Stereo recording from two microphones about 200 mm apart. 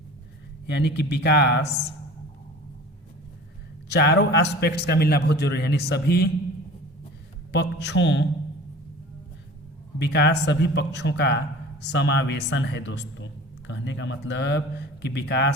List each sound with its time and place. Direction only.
0.7 s a man's voice: 60° left (ahead or behind)
3.8 s a man's voice: 55° left (ahead or behind)
7.5 s a man's voice: 55° left (ahead or behind)
10.0 s a man's voice: 55° left (ahead or behind)